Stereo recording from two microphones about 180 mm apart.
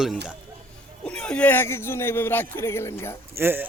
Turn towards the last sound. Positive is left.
turn(degrees=-10)  # may be behind; listen again after turning